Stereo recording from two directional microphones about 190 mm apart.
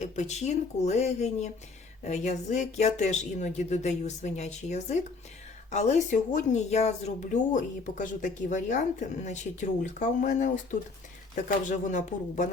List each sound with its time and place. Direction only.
0.0 s speech: 35° left (ahead or behind)